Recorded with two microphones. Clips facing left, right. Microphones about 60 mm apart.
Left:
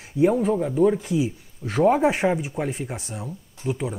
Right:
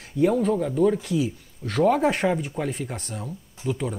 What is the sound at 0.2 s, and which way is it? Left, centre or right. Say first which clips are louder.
Speech: left 1 dB; centre.